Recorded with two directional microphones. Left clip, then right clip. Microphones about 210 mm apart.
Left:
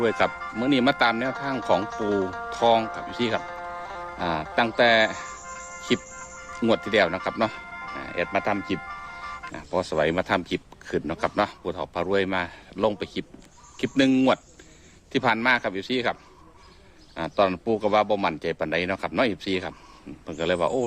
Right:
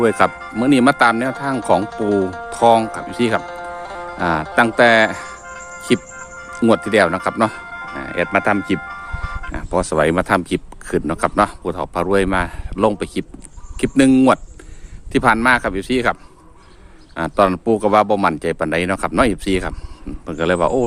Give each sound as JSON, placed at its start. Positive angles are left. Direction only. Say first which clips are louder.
{"t": 0.0, "sound": "speech", "louder": "right 8 dB", "side_deg": -25}
{"t": 0.3, "sound": "speech", "louder": "right 6 dB", "side_deg": -10}
{"t": 0.6, "sound": "speech", "louder": "right 8 dB", "side_deg": -25}
{"t": 1.8, "sound": "speech", "louder": "right 7 dB", "side_deg": -10}
{"t": 2.5, "sound": "speech", "louder": "right 8 dB", "side_deg": -30}
{"t": 3.4, "sound": "music", "louder": "right 6 dB", "side_deg": -10}
{"t": 4.2, "sound": "speech", "louder": "right 9 dB", "side_deg": -30}
{"t": 5.2, "sound": "music", "louder": "right 5 dB", "side_deg": -10}
{"t": 6.9, "sound": "speech", "louder": "right 7 dB", "side_deg": -30}
{"t": 7.5, "sound": "music", "louder": "right 6 dB", "side_deg": -10}
{"t": 7.9, "sound": "speech", "louder": "right 8 dB", "side_deg": -30}
{"t": 8.8, "sound": "ice cream truck", "louder": "right 7 dB", "side_deg": -10}
{"t": 9.5, "sound": "speech", "louder": "right 8 dB", "side_deg": -30}
{"t": 17.2, "sound": "speech", "louder": "right 7 dB", "side_deg": -30}